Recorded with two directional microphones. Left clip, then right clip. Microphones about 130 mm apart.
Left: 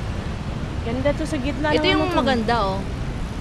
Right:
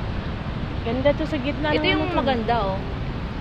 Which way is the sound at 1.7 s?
70° left (ahead or behind).